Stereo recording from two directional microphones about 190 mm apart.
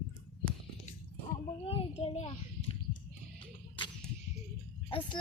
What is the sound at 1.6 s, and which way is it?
Child singing, 30° left (ahead or behind).